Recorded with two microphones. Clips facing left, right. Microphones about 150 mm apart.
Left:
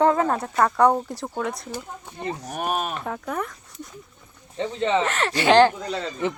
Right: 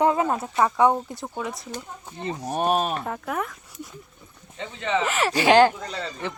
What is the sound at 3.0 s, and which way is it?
Speech, 5° right (ahead or behind).